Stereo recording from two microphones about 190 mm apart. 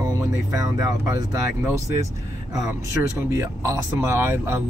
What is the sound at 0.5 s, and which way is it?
Speech, 20° right (ahead or behind).